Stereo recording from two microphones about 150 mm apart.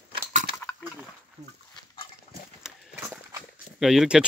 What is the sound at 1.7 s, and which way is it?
Pig, 35° left (ahead or behind).